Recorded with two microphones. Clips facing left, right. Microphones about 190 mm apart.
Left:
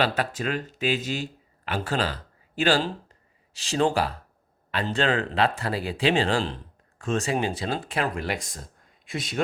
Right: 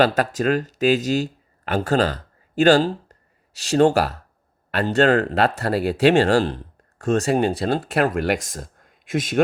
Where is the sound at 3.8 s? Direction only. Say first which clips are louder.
Right 6 dB; 70° right (ahead or behind).